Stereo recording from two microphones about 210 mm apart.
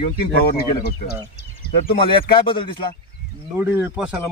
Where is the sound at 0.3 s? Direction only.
45° left (ahead or behind).